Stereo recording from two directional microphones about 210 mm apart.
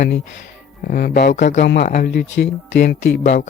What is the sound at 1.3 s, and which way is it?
Speech, 35° left (ahead or behind).